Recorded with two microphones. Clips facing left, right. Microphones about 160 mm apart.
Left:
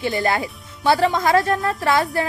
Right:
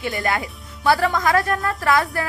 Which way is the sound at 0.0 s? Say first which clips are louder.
Left 3 dB; 20° left (ahead or behind).